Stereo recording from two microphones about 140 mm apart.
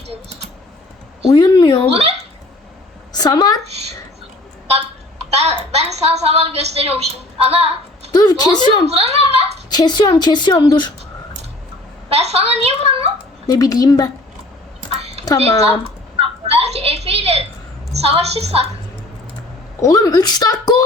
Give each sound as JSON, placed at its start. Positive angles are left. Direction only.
{"t": 1.3, "sound": "a woman's voice", "side_deg": 30}
{"t": 1.9, "sound": "a woman's voice", "side_deg": -45}
{"t": 3.1, "sound": "a woman's voice", "side_deg": 30}
{"t": 5.3, "sound": "a woman's voice", "side_deg": -50}
{"t": 8.1, "sound": "a woman's voice", "side_deg": 30}
{"t": 8.9, "sound": "a woman's voice", "side_deg": -45}
{"t": 9.6, "sound": "speech", "side_deg": 30}
{"t": 12.0, "sound": "a woman's voice", "side_deg": -45}
{"t": 13.5, "sound": "a woman's voice", "side_deg": 25}
{"t": 14.8, "sound": "a sound", "side_deg": -45}
{"t": 18.0, "sound": "a woman's voice", "side_deg": -45}
{"t": 19.8, "sound": "a woman's voice", "side_deg": 25}